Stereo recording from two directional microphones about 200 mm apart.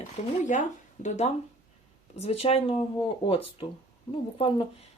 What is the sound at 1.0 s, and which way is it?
A woman's voice, 35° left (ahead or behind).